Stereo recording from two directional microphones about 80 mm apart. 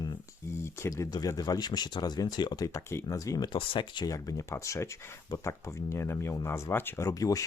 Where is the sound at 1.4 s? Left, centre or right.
Left.